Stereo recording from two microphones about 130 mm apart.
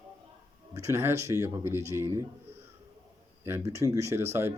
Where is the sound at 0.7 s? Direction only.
20° right (ahead or behind).